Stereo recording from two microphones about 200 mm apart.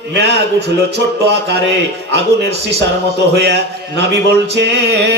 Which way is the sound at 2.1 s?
55° right (ahead or behind).